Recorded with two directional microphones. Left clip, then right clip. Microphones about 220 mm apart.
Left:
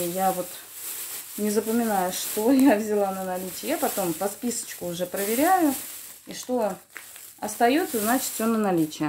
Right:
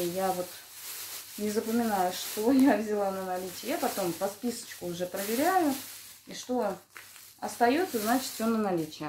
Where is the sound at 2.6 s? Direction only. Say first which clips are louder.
Left 5 dB; 45° left (ahead or behind).